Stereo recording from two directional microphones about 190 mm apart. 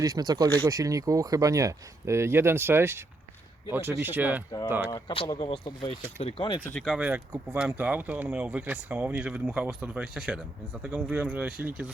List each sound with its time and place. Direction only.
0.0 s speech: 20° right (ahead or behind)
4.9 s speech: 20° left (ahead or behind)
6.7 s speech: centre (ahead or behind)